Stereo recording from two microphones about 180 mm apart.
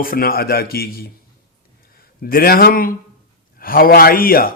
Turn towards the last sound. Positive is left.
turn(degrees=55)  # may be behind; listen again after turning